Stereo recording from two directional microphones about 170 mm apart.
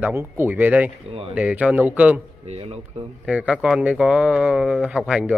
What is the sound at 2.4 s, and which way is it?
Speech, 35° right (ahead or behind).